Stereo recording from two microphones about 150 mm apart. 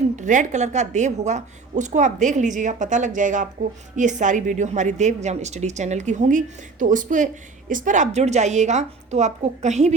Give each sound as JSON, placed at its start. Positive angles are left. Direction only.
{"t": 0.2, "sound": "a woman's voice", "side_deg": -55}